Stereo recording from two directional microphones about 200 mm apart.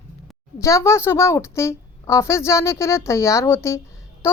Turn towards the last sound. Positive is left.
turn(degrees=15)  # may be behind; listen again after turning